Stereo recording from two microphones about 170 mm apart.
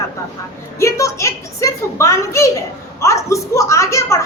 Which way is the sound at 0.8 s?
15° left (ahead or behind).